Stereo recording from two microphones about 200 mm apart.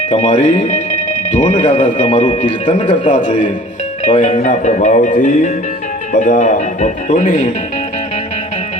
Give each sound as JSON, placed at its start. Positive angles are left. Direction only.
{"t": 0.1, "sound": "speech", "side_deg": 35}
{"t": 2.8, "sound": "speech", "side_deg": 25}